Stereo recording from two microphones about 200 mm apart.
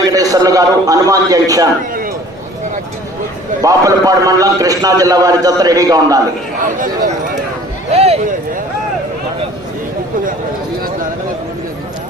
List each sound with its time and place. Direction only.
0.1 s a man's voice: 15° right (ahead or behind)
3.6 s a man's voice: 15° right (ahead or behind)
6.6 s speech: 40° right (ahead or behind)
7.9 s a sound: 30° right (ahead or behind)